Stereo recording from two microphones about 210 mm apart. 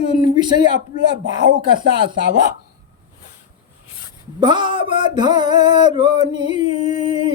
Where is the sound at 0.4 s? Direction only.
20° right (ahead or behind).